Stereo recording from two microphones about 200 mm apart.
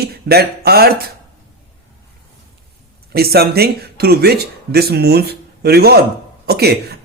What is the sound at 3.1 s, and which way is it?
A man's voice, 50° right (ahead or behind).